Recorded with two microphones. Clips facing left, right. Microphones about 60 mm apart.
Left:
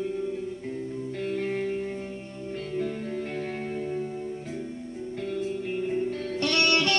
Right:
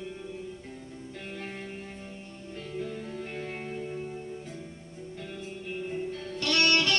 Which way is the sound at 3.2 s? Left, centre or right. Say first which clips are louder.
Left 5 dB; left.